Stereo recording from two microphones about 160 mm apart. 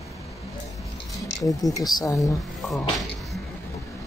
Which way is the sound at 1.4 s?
20° left (ahead or behind).